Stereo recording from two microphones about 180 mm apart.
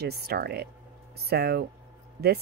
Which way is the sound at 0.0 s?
60° right (ahead or behind).